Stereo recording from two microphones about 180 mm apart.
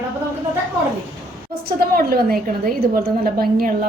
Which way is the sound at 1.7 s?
55° right (ahead or behind).